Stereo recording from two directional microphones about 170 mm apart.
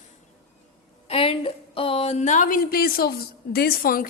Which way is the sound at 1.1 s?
30° left (ahead or behind).